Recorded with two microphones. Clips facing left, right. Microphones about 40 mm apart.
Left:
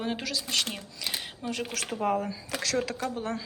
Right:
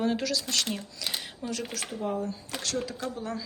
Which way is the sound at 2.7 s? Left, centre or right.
Left.